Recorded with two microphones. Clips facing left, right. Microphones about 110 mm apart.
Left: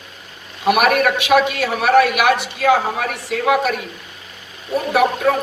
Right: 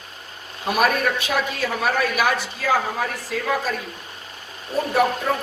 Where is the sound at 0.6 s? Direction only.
75° left (ahead or behind).